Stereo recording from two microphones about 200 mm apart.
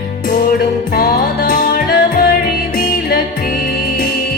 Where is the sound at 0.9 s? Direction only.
50° left (ahead or behind).